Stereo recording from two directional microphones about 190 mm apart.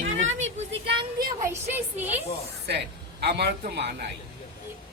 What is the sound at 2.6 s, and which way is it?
Speech, 60° right (ahead or behind).